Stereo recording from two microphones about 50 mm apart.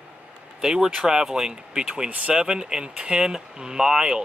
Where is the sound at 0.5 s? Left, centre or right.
Centre.